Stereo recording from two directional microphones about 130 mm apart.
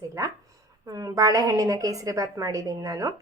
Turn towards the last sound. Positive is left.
turn(degrees=-25)  # may be behind; listen again after turning